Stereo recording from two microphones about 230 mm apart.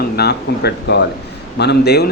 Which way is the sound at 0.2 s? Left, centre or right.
Left.